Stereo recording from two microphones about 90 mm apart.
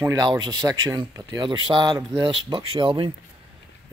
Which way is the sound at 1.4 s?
60° right (ahead or behind).